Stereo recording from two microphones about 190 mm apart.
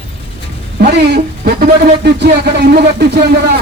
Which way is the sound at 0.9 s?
60° right (ahead or behind).